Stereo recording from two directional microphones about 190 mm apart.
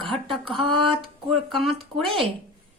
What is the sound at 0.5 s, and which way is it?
Speech, 30° right (ahead or behind).